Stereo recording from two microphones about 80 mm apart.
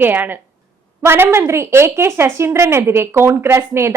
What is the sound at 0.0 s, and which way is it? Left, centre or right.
A woman's voice, right.